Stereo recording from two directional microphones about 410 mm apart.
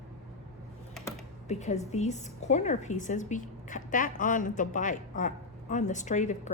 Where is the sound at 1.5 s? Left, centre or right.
Centre.